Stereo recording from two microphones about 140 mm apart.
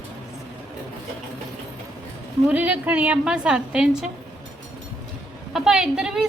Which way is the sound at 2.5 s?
10° right (ahead or behind).